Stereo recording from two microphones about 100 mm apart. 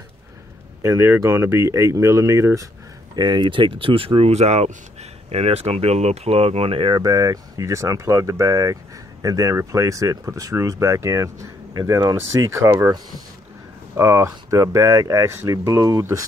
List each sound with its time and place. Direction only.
0.8 s speech: 25° right (ahead or behind)
3.2 s speech: 50° right (ahead or behind); by 7.0 s 65° right (ahead or behind)
7.0 s speech: 40° right (ahead or behind)